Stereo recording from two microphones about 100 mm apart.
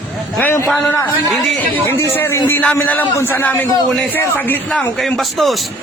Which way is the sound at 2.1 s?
20° left (ahead or behind).